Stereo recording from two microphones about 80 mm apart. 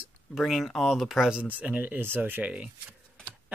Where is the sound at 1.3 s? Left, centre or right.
Centre.